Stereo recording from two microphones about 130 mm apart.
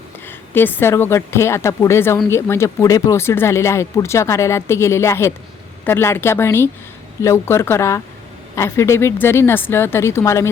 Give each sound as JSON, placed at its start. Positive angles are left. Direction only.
{"t": 0.3, "sound": "speech", "side_deg": 15}